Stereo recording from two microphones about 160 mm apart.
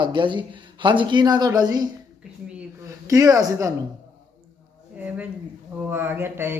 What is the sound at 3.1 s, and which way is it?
Speech, 20° right (ahead or behind).